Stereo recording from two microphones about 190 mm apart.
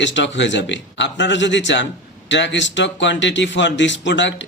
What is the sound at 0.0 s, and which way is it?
Speech, 70° left (ahead or behind).